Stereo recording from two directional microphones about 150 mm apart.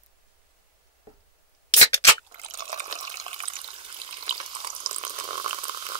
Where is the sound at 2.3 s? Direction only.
50° right (ahead or behind).